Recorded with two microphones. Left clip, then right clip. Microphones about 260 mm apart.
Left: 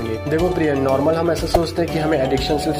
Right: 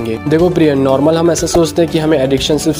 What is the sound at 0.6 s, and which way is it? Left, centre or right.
Speech, right.